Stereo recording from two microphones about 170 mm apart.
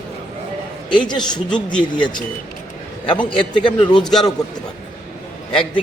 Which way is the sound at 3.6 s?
30° left (ahead or behind).